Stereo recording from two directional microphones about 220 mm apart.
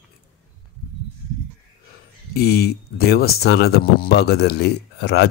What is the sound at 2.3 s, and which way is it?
Speech, 45° left (ahead or behind).